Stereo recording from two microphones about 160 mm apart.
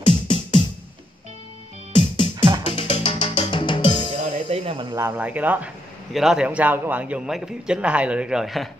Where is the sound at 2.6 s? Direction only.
35° left (ahead or behind).